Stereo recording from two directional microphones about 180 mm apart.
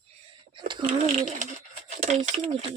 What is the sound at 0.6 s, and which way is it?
Speech, 25° right (ahead or behind).